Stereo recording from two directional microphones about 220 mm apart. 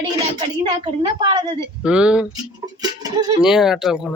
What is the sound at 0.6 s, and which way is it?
A woman's voice, 20° right (ahead or behind).